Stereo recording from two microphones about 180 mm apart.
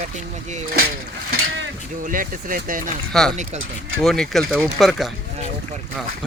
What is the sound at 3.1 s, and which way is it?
Speech, centre (ahead or behind).